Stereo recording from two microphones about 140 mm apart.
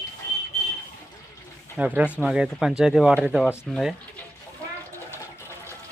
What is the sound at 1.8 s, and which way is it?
Speech, 10° right (ahead or behind).